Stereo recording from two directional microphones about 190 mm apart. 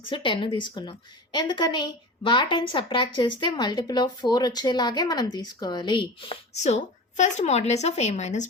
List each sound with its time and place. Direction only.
0.1 s a woman's voice: 25° left (ahead or behind)